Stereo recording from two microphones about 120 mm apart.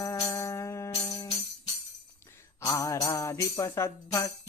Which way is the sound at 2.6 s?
25° left (ahead or behind).